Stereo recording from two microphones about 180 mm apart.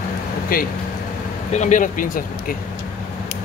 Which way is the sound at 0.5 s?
55° left (ahead or behind).